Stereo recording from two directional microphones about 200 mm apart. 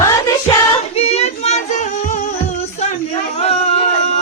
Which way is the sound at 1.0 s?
30° left (ahead or behind).